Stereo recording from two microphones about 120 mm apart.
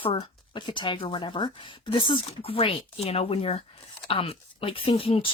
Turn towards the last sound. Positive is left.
turn(degrees=50)  # may be behind; listen again after turning